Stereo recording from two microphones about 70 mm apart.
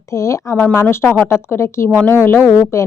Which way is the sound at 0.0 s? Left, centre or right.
Left.